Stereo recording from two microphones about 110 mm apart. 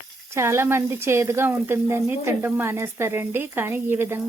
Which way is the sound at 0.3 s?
25° right (ahead or behind).